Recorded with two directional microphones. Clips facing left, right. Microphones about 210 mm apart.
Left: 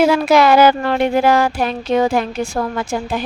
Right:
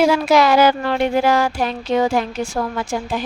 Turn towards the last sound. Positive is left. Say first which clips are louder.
# left 2 dB
turn(degrees=60)  # may be behind; listen again after turning